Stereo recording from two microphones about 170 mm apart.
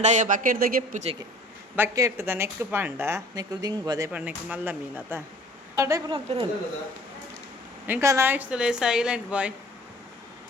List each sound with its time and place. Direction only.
0.0 s speech: 45° right (ahead or behind)
1.7 s speech: 15° right (ahead or behind)
4.4 s a woman's voice: 10° right (ahead or behind)
6.1 s a woman's voice: 30° right (ahead or behind)
7.9 s speech: 15° right (ahead or behind)